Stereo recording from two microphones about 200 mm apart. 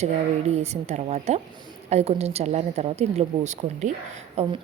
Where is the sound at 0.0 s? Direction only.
35° right (ahead or behind).